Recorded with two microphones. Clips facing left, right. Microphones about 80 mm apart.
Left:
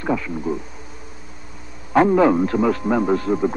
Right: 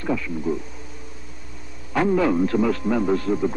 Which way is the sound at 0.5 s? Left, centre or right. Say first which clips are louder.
Even; centre.